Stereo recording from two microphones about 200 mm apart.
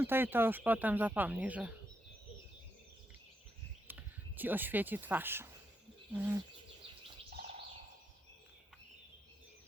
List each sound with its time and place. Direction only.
0.0 s speech: 10° right (ahead or behind)
3.8 s speech: 10° right (ahead or behind)
7.3 s bird: 50° right (ahead or behind)